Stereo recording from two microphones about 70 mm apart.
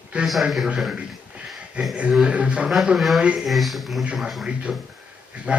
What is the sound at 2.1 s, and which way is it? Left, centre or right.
Speech, centre.